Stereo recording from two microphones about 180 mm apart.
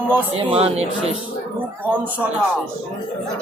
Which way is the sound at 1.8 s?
10° right (ahead or behind).